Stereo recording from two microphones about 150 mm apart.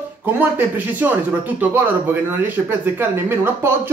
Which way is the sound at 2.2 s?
15° right (ahead or behind).